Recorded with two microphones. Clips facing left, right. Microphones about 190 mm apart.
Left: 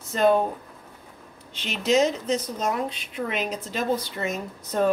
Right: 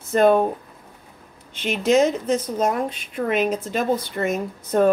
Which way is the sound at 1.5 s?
50° right (ahead or behind).